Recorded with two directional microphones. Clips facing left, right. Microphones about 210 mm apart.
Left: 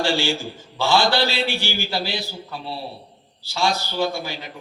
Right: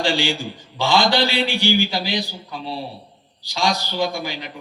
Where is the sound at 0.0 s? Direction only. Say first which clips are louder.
Even; 15° right (ahead or behind).